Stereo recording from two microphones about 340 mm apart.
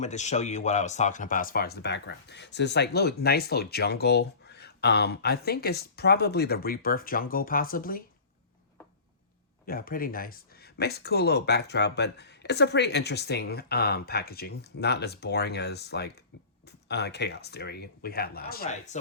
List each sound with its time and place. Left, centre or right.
0.0 s speech: left
9.6 s speech: left